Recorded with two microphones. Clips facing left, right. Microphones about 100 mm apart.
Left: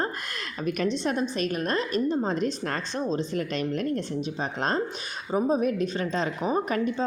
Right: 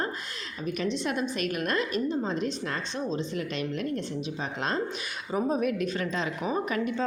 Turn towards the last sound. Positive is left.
turn(degrees=35)  # may be behind; listen again after turning